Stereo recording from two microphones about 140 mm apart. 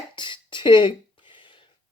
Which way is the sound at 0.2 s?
35° left (ahead or behind).